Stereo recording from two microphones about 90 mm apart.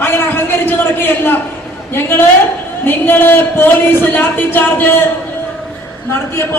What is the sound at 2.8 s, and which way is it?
A man's voice, 20° left (ahead or behind).